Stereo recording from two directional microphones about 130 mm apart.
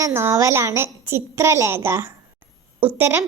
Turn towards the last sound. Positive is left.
turn(degrees=-15)  # may be behind; listen again after turning